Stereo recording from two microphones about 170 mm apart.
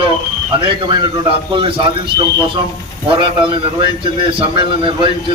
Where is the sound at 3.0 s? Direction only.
30° right (ahead or behind).